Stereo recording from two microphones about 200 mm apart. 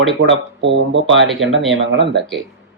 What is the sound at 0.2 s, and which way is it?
Speech, 65° right (ahead or behind).